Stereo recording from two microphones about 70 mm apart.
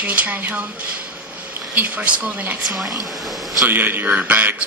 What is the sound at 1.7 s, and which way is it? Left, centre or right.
Speech, right.